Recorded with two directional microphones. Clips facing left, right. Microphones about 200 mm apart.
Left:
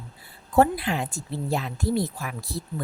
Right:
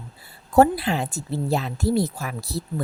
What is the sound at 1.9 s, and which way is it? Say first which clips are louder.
Speech: right 3 dB; 80° right.